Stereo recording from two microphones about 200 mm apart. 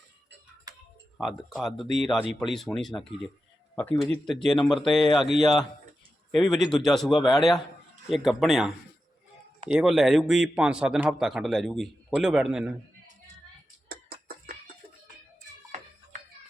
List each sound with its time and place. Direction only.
0.7 s typing: 20° right (ahead or behind)
1.2 s a man's voice: centre (ahead or behind)
13.8 s a sound: 50° right (ahead or behind)